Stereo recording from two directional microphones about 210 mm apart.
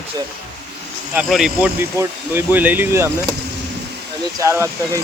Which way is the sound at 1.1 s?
5° right (ahead or behind).